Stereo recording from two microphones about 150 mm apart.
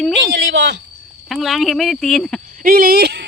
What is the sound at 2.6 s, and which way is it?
Speech, 75° right (ahead or behind).